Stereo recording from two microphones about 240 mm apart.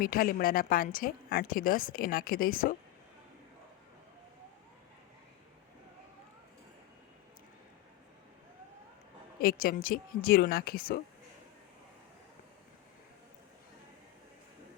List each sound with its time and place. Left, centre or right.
0.0 s a woman's voice: left
9.4 s a woman's voice: left